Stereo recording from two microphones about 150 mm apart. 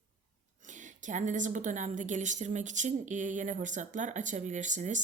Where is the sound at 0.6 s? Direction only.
55° right (ahead or behind).